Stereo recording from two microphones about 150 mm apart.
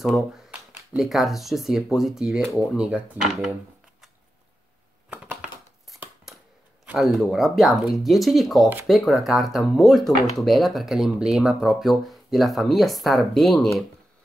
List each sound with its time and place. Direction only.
0.0 s speech: 5° right (ahead or behind)
5.1 s a sound: 10° right (ahead or behind)
6.9 s speech: centre (ahead or behind)